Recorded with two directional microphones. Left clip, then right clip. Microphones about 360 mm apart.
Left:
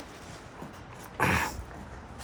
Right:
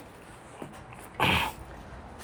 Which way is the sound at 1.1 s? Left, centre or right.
Centre.